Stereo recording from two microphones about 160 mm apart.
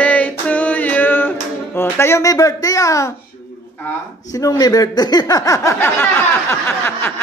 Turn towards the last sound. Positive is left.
turn(degrees=15)  # may be behind; listen again after turning